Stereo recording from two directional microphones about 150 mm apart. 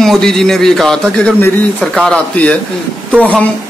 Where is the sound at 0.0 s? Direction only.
Centre (ahead or behind).